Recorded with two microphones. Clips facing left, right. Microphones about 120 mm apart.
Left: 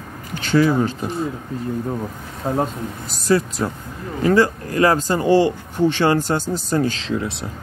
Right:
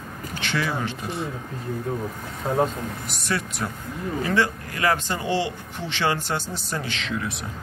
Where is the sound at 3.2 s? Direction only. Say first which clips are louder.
Left 10 dB; 35° left (ahead or behind).